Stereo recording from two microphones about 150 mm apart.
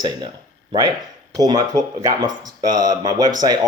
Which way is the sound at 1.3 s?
25° right (ahead or behind).